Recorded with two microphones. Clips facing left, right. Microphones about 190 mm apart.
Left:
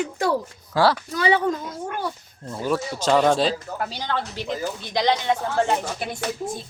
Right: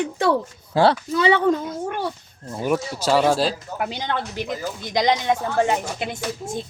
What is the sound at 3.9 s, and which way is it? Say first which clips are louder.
Speech: right 2 dB; 20° right (ahead or behind).